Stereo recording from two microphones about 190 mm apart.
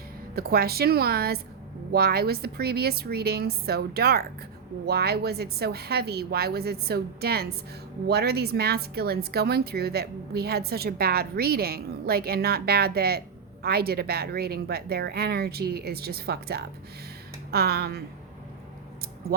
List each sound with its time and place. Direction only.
0.3 s a woman's voice: 55° right (ahead or behind)